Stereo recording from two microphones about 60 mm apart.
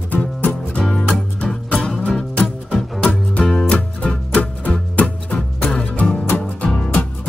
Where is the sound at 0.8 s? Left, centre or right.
Centre.